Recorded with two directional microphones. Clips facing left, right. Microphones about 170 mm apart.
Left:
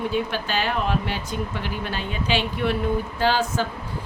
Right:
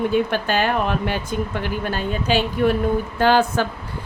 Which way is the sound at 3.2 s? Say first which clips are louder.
Right 7 dB; 55° right (ahead or behind).